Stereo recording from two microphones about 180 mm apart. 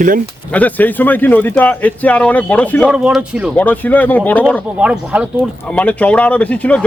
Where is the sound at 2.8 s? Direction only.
5° right (ahead or behind).